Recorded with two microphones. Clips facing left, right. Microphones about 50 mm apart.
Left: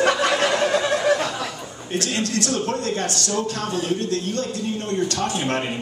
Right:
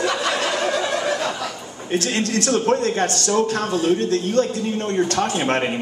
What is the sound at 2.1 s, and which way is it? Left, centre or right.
A man's voice, right.